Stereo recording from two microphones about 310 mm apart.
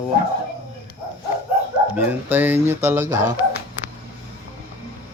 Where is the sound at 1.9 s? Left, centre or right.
Centre.